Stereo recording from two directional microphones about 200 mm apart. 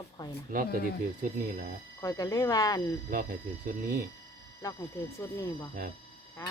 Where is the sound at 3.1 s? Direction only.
45° right (ahead or behind).